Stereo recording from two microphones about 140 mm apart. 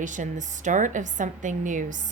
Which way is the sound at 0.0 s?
65° right (ahead or behind).